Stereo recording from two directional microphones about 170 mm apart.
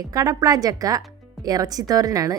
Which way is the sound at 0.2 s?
20° right (ahead or behind).